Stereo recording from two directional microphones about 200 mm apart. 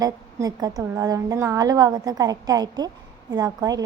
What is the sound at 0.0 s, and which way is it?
A woman's voice, 20° right (ahead or behind).